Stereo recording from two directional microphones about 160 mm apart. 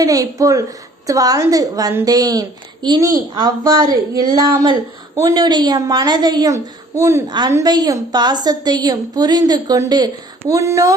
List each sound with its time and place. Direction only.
0.0 s a woman's voice: 20° right (ahead or behind)